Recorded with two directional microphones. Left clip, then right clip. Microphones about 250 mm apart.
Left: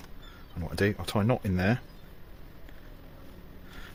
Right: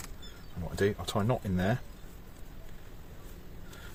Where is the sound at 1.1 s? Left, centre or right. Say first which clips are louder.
Left 3 dB; left.